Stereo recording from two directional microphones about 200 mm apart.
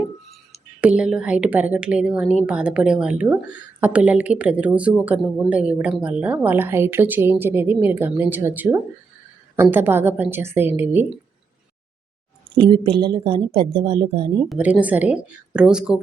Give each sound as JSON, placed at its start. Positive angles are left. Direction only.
{"t": 0.5, "sound": "a woman's voice", "side_deg": -5}
{"t": 12.5, "sound": "speech", "side_deg": -25}
{"t": 14.5, "sound": "a woman's voice", "side_deg": -5}